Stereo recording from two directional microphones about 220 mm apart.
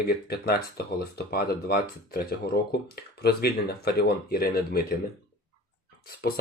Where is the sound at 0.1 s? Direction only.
45° left (ahead or behind).